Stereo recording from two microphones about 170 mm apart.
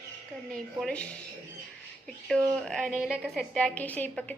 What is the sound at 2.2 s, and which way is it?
A woman's voice, 5° left (ahead or behind).